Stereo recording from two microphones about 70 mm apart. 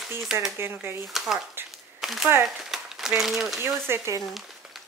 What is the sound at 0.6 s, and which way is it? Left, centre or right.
Speech, right.